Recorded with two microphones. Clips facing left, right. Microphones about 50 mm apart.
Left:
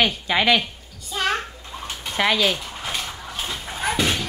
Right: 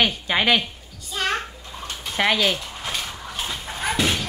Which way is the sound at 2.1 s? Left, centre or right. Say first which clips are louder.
Even; centre.